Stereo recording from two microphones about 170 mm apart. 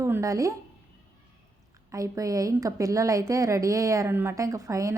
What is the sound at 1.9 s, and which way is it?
A woman's voice, 20° right (ahead or behind).